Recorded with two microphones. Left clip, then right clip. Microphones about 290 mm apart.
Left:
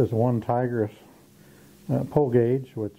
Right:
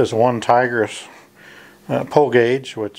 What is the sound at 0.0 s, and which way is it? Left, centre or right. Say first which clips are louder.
Speech: right 9 dB; centre.